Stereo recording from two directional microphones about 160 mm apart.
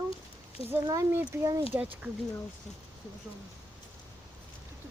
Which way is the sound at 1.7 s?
10° right (ahead or behind).